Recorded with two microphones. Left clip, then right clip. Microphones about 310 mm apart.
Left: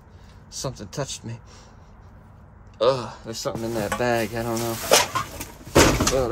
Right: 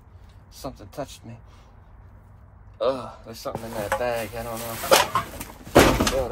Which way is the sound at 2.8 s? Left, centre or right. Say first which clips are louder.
Left 4 dB; left.